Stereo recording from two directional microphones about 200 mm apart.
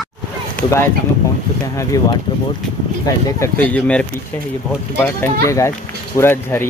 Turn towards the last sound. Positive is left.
turn(degrees=10)  # may be behind; listen again after turning